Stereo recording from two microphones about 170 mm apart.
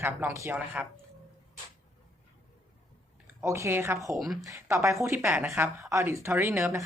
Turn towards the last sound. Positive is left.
turn(degrees=-15)  # may be behind; listen again after turning